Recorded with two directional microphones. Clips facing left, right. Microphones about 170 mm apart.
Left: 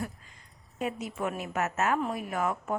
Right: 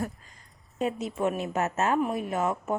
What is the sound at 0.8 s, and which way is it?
A woman's voice, 25° right (ahead or behind).